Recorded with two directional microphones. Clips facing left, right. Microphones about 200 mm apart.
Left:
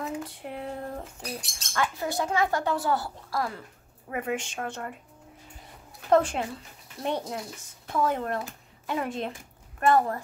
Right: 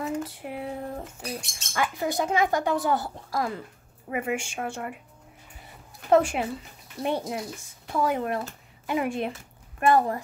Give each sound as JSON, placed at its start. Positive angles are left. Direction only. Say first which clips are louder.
{"t": 0.0, "sound": "a sound", "louder": "right 3 dB", "side_deg": -5}
{"t": 1.6, "sound": "speech", "louder": "right 1 dB", "side_deg": -10}
{"t": 6.0, "sound": "a woman's voice", "louder": "right 2 dB", "side_deg": -10}